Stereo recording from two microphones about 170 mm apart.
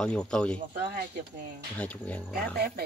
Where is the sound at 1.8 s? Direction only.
10° left (ahead or behind).